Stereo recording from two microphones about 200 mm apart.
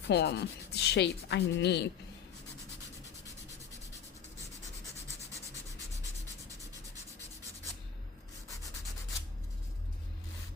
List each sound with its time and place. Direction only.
0.1 s speech: 55° left (ahead or behind)